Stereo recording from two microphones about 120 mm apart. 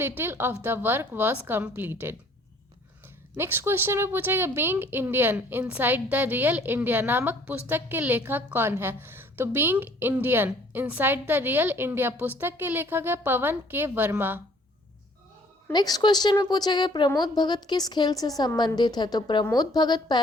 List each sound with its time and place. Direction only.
0.2 s a woman's voice: 20° right (ahead or behind)
3.3 s a woman's voice: 20° right (ahead or behind)
15.7 s a woman's voice: 35° left (ahead or behind)